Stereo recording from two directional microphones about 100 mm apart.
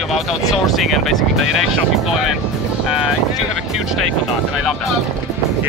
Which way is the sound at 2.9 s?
5° right (ahead or behind).